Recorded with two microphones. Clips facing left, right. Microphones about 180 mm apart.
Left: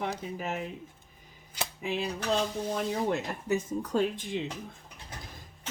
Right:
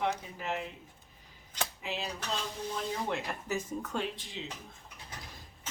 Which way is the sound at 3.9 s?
45° left (ahead or behind).